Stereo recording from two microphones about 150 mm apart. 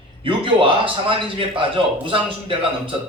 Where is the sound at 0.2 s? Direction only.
35° right (ahead or behind).